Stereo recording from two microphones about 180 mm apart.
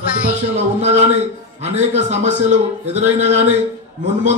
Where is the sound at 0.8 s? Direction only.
40° right (ahead or behind).